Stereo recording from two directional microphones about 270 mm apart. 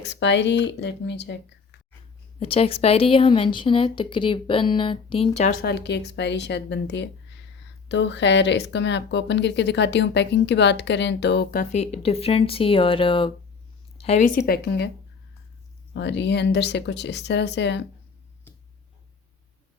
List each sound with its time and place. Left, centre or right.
0.0 s speech: left
2.4 s speech: left
11.7 s speech: left
16.0 s speech: left